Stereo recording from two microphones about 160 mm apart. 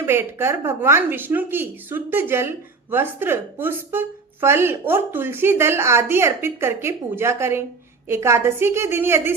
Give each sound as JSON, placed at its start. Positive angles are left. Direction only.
{"t": 0.0, "sound": "speech", "side_deg": -15}